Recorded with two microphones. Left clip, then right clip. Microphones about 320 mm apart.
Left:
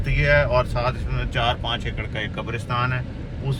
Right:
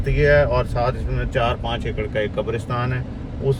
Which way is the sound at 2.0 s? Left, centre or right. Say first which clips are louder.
Right 6 dB; centre.